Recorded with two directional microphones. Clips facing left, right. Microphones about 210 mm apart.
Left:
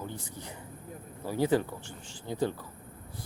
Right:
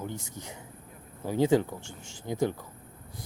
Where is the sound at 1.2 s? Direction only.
20° right (ahead or behind).